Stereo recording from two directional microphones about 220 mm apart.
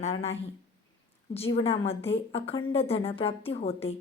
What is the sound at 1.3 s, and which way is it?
A woman's voice, 25° left (ahead or behind).